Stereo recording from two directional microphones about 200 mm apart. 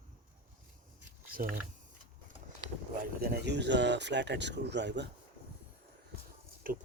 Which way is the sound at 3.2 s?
55° right (ahead or behind).